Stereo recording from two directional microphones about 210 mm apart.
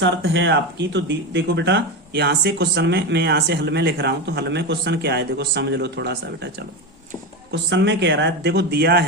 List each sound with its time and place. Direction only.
0.0 s speech: 60° right (ahead or behind)